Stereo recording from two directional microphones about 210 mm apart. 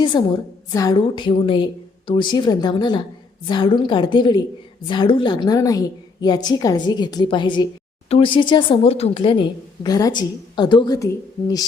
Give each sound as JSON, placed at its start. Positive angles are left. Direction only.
{"t": 0.1, "sound": "a woman's voice", "side_deg": 20}